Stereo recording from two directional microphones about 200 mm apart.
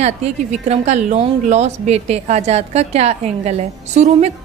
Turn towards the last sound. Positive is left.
turn(degrees=-35)  # may be behind; listen again after turning